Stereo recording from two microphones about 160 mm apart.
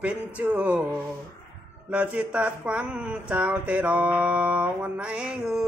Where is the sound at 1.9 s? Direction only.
10° right (ahead or behind).